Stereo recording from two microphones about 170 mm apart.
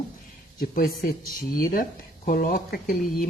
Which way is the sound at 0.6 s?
60° left (ahead or behind).